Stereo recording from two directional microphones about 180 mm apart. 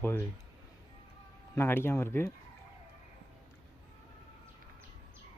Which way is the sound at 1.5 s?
15° left (ahead or behind).